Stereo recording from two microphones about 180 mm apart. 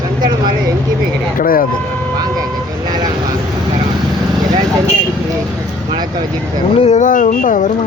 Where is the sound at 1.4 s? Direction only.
50° left (ahead or behind).